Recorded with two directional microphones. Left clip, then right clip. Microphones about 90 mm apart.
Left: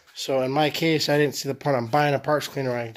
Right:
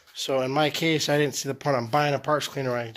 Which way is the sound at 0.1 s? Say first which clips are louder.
Left 1 dB; 30° left (ahead or behind).